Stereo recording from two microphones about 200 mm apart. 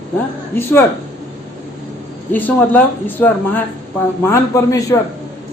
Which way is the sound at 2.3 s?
10° left (ahead or behind).